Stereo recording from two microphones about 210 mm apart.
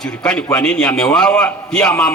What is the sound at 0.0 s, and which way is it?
A man's voice, 5° left (ahead or behind).